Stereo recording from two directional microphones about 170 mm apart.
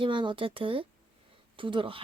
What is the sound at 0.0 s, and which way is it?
A woman's voice, 30° right (ahead or behind).